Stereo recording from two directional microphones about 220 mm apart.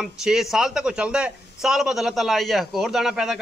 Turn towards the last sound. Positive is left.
turn(degrees=0)  # may be behind; listen again after turning